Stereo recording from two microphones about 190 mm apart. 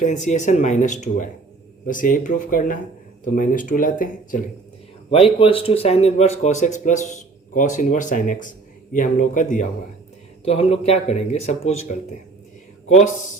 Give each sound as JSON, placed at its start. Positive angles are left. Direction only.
{"t": 0.0, "sound": "speech", "side_deg": 40}
{"t": 5.1, "sound": "speech", "side_deg": 30}
{"t": 10.4, "sound": "speech", "side_deg": 30}